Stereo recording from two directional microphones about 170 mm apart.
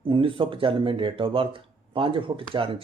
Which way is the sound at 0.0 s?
30° right (ahead or behind).